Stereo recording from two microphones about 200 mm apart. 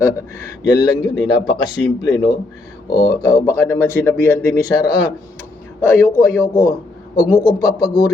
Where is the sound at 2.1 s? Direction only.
20° left (ahead or behind).